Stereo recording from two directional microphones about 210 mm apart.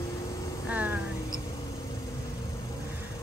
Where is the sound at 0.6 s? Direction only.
5° right (ahead or behind).